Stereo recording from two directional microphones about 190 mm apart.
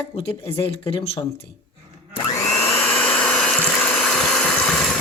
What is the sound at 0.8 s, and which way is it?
Speech, 30° left (ahead or behind).